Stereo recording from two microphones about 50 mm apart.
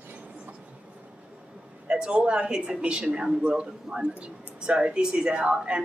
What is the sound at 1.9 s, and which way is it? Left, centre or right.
A woman's voice, centre.